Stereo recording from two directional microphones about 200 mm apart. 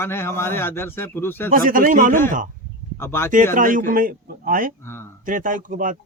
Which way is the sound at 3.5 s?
40° right (ahead or behind).